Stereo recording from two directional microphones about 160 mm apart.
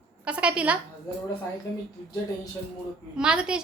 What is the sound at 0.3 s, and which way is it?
Speech, 5° right (ahead or behind).